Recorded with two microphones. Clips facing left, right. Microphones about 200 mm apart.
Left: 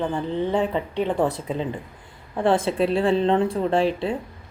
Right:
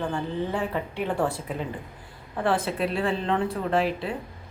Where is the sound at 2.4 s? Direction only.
25° left (ahead or behind).